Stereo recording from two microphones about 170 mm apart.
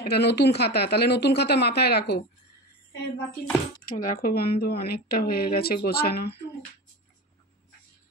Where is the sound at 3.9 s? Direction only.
55° left (ahead or behind); by 6.4 s 70° left (ahead or behind).